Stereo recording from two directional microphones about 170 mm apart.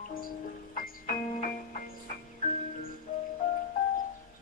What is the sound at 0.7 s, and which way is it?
Music, 50° left (ahead or behind).